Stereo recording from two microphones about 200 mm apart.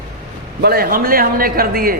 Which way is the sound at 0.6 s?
50° right (ahead or behind).